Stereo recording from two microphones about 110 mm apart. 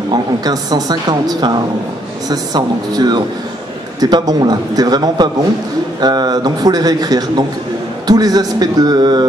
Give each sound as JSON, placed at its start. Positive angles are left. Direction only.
{"t": 0.1, "sound": "a man's voice", "side_deg": -35}